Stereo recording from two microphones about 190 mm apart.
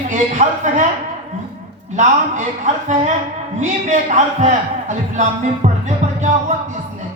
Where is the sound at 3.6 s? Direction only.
40° right (ahead or behind).